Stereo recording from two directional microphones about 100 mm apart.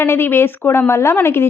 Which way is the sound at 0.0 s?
25° left (ahead or behind).